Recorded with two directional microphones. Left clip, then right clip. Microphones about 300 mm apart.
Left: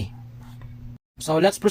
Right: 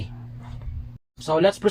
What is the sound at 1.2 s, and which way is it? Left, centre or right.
Speech, left.